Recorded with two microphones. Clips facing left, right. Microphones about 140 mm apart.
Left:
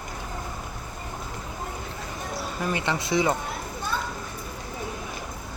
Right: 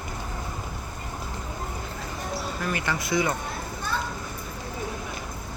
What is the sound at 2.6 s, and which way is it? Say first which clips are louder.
Speech: left 4 dB; 20° left (ahead or behind).